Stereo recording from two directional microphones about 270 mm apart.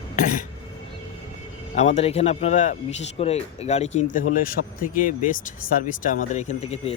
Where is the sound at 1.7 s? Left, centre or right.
Left.